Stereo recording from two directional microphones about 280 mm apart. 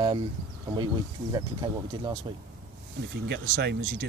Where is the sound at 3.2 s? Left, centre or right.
Right.